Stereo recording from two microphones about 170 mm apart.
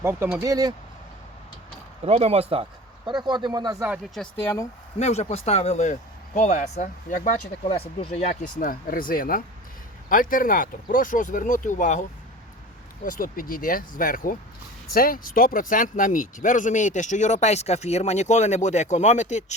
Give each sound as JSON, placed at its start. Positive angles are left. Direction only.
{"t": 0.0, "sound": "speech", "side_deg": -15}
{"t": 2.0, "sound": "speech", "side_deg": -35}
{"t": 3.8, "sound": "speech", "side_deg": -5}
{"t": 4.9, "sound": "speech", "side_deg": 40}
{"t": 13.1, "sound": "speech", "side_deg": 55}